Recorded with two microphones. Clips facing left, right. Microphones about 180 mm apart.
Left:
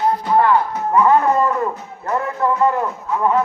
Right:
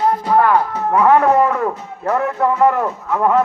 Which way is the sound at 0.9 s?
70° right (ahead or behind).